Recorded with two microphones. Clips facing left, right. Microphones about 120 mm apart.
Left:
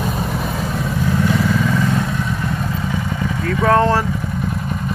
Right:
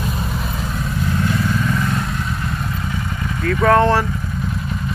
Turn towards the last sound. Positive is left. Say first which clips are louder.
# right 1 dB
turn(degrees=15)  # may be behind; listen again after turning